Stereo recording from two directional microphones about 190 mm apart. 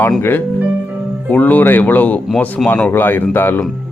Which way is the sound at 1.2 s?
10° left (ahead or behind).